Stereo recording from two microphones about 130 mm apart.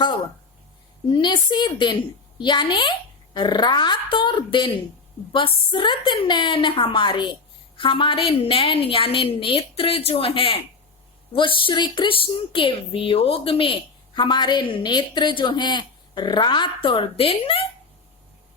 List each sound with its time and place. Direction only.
1.1 s a woman's voice: 35° left (ahead or behind)